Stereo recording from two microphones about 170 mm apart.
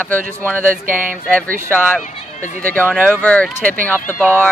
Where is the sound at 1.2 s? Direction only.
5° left (ahead or behind).